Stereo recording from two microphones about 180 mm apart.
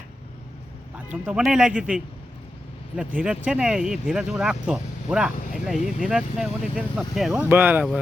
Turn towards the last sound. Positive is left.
turn(degrees=-10)  # may be behind; listen again after turning